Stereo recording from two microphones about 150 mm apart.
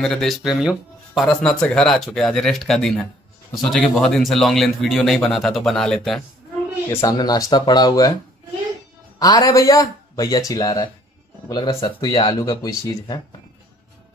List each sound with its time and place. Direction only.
0.0 s speech: 5° left (ahead or behind)
6.9 s speech: 20° left (ahead or behind)
9.2 s speech: 25° left (ahead or behind)